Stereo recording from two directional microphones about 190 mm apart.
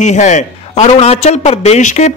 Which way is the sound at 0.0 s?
40° left (ahead or behind).